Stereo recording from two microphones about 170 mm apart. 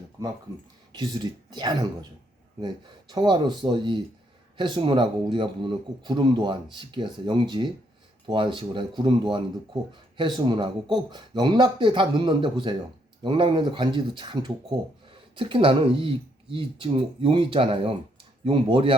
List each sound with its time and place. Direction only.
0.9 s speech: 25° right (ahead or behind)